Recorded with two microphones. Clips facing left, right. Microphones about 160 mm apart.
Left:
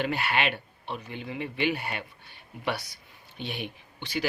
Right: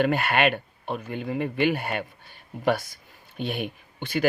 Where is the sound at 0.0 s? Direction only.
50° right (ahead or behind).